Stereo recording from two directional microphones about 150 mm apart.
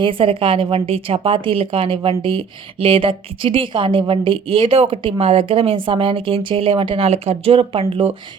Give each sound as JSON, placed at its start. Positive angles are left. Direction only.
{"t": 0.0, "sound": "a woman's voice", "side_deg": -35}